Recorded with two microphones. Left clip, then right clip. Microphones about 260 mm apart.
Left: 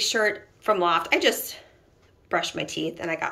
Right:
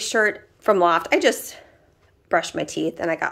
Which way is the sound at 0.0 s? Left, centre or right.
Centre.